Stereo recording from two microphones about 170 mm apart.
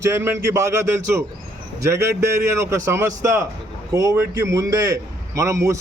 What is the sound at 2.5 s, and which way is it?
A man's voice, 15° right (ahead or behind).